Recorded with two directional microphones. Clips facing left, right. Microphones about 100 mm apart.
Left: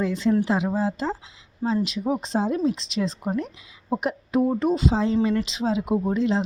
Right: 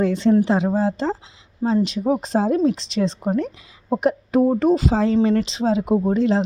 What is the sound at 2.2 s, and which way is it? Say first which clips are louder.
A woman's voice: right 5 dB; 45° right (ahead or behind).